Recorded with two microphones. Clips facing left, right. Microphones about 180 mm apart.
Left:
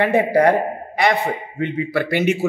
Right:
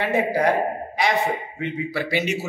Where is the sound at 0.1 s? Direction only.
60° left (ahead or behind).